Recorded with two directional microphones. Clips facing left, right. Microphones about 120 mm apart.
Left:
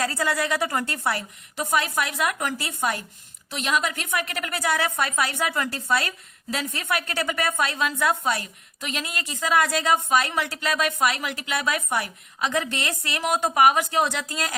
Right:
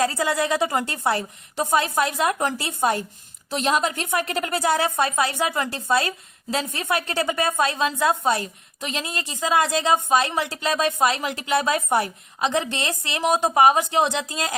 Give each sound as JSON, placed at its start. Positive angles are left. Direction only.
{"t": 0.0, "sound": "a woman's voice", "side_deg": -20}